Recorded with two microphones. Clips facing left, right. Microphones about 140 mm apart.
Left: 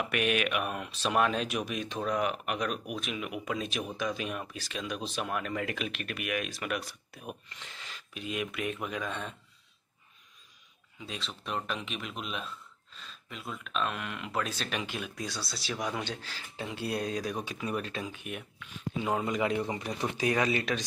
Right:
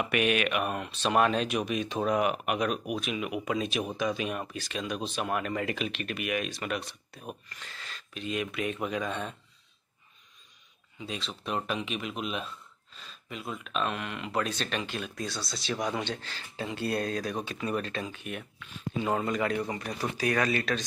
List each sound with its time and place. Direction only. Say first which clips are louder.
0.0 s speech: right 2 dB; centre (ahead or behind)
2.0 s speech: right 3 dB; 10° right (ahead or behind)
11.0 s speech: right 3 dB; centre (ahead or behind); by 20.8 s 15° left (ahead or behind)